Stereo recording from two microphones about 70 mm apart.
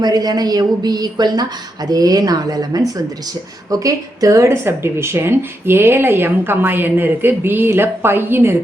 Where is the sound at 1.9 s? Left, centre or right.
Right.